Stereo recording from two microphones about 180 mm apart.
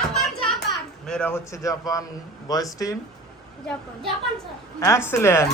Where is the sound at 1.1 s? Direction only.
10° left (ahead or behind).